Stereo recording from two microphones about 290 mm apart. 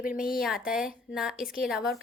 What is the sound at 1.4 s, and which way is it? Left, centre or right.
Speech, left.